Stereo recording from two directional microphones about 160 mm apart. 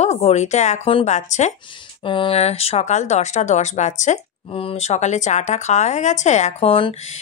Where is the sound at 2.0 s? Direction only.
30° left (ahead or behind).